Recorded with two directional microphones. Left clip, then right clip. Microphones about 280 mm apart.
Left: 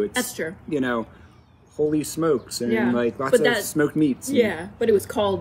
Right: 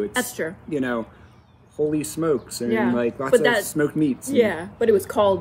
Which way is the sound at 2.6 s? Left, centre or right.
Centre.